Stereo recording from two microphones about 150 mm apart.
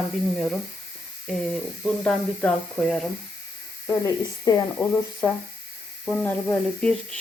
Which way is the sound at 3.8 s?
20° left (ahead or behind).